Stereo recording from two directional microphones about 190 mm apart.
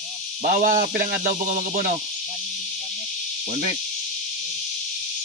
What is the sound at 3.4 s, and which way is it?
Speech, 40° right (ahead or behind).